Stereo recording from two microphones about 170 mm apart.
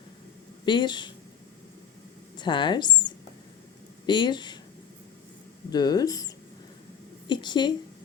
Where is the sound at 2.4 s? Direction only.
25° left (ahead or behind).